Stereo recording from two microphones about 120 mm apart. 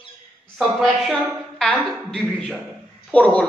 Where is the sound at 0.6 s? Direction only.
Centre (ahead or behind).